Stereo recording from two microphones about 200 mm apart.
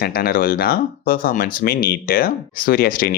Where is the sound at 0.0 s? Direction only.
50° left (ahead or behind).